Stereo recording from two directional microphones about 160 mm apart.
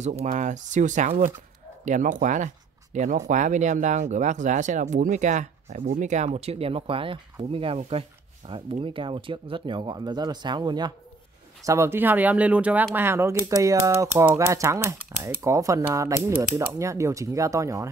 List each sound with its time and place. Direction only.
0.0 s speech: 45° right (ahead or behind); by 17.8 s 20° right (ahead or behind)